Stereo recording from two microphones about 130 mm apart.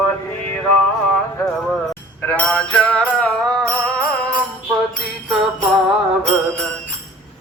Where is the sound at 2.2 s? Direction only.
10° left (ahead or behind).